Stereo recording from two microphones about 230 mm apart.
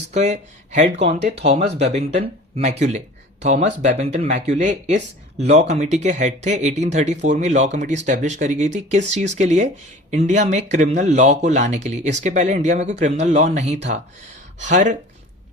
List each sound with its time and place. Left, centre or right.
0.1 s speech: right